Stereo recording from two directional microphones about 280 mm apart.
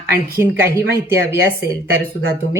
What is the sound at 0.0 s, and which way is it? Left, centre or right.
Speech, right.